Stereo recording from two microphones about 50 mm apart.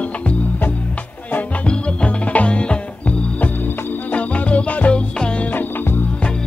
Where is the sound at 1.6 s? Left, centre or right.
Left.